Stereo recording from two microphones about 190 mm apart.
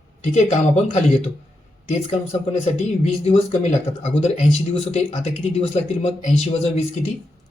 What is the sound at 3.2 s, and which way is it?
Speech, 30° left (ahead or behind).